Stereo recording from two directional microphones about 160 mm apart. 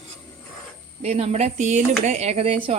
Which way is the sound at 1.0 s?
40° right (ahead or behind).